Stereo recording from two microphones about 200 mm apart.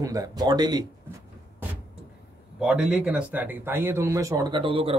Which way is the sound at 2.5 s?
5° right (ahead or behind).